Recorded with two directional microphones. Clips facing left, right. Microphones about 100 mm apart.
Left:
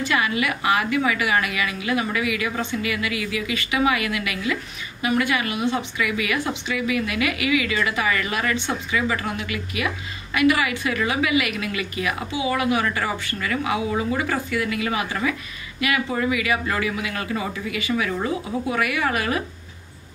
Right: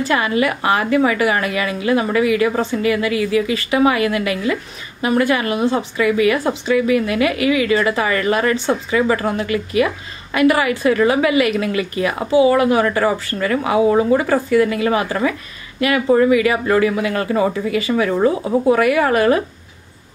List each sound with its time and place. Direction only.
0.0 s a woman's voice: 35° right (ahead or behind)